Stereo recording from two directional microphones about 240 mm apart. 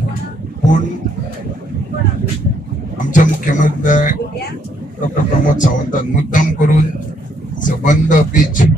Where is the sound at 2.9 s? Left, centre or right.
Left.